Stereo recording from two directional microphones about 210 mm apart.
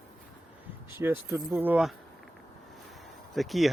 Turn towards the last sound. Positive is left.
turn(degrees=0)  # may be behind; listen again after turning